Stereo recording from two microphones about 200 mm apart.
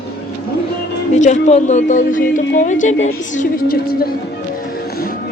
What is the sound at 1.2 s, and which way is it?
A woman's voice, 35° left (ahead or behind).